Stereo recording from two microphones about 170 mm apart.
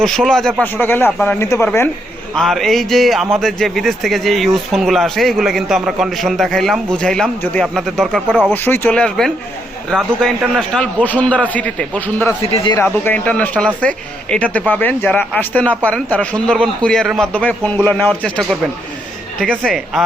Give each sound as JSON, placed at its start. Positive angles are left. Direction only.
{"t": 0.0, "sound": "a man's voice", "side_deg": 0}
{"t": 2.3, "sound": "speech", "side_deg": 0}
{"t": 8.5, "sound": "a man's voice", "side_deg": 10}
{"t": 12.5, "sound": "speech", "side_deg": 35}
{"t": 12.7, "sound": "a man's voice", "side_deg": 10}